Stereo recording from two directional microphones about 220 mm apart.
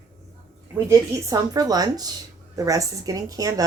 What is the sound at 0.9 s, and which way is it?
Speech, 15° right (ahead or behind).